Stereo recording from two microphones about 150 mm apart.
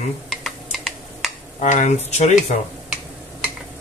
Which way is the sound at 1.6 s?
50° left (ahead or behind).